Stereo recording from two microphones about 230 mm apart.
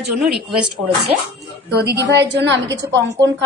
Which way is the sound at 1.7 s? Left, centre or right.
Right.